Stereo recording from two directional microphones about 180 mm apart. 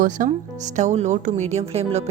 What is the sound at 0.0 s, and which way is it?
Speech, 45° right (ahead or behind).